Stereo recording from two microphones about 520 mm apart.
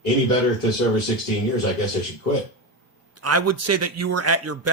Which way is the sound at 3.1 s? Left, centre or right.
Right.